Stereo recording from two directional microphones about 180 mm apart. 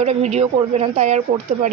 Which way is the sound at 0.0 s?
35° right (ahead or behind).